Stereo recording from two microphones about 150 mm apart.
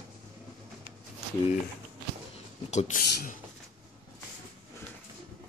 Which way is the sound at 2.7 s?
50° left (ahead or behind).